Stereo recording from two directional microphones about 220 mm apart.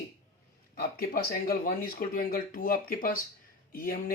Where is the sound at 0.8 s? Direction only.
40° left (ahead or behind).